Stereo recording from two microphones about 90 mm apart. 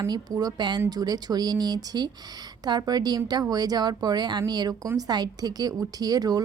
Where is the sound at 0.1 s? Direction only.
45° right (ahead or behind).